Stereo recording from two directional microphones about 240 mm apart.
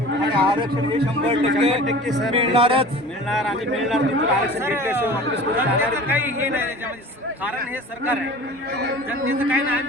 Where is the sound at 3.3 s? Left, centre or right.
Centre.